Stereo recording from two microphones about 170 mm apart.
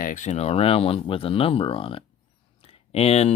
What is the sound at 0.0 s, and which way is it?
Speech, 50° left (ahead or behind).